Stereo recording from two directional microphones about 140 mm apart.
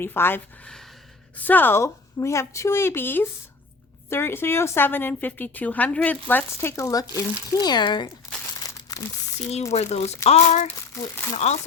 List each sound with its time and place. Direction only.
0.0 s a woman's voice: 15° left (ahead or behind); by 8.1 s 30° left (ahead or behind)
8.5 s crumpling: 25° left (ahead or behind)
9.7 s speech: 50° left (ahead or behind)
10.7 s speech: 15° left (ahead or behind)
11.3 s speech: 50° left (ahead or behind)